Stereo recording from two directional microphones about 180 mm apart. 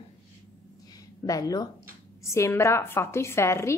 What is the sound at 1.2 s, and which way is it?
A woman's voice, 20° left (ahead or behind).